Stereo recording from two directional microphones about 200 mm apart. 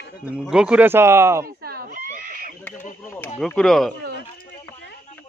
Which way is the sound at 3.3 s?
5° left (ahead or behind).